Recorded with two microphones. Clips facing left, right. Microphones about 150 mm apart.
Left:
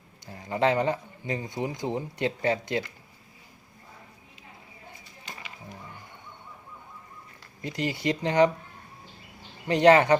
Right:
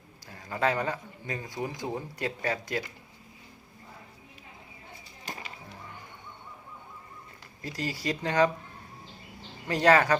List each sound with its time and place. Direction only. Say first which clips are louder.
0.3 s a man's voice: left 4 dB; 20° left (ahead or behind)
7.6 s a man's voice: left 4 dB; 20° left (ahead or behind)
9.6 s a man's voice: left 4 dB; 20° left (ahead or behind)